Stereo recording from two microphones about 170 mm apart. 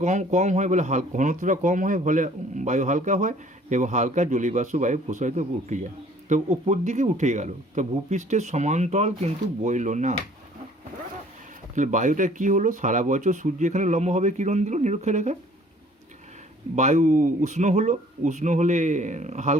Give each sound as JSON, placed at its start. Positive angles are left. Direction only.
{"t": 0.0, "sound": "speech", "side_deg": -45}
{"t": 11.7, "sound": "speech", "side_deg": -50}
{"t": 16.7, "sound": "speech", "side_deg": -40}